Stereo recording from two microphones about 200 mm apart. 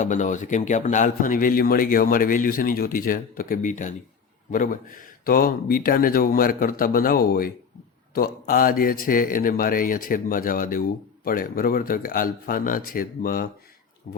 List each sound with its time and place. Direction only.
0.0 s a man's voice: 40° left (ahead or behind)